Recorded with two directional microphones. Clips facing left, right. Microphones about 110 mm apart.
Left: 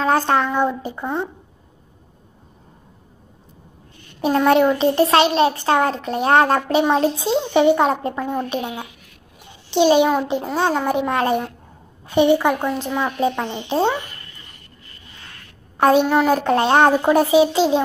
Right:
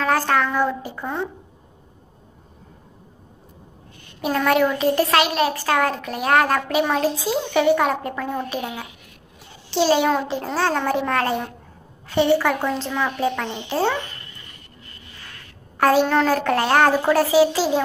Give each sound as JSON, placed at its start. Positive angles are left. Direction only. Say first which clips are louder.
{"t": 0.0, "sound": "a child's voice", "louder": "left 2 dB", "side_deg": 25}
{"t": 4.2, "sound": "a child's voice", "louder": "left 4 dB", "side_deg": 25}
{"t": 15.8, "sound": "a child's voice", "louder": "left 2 dB", "side_deg": 20}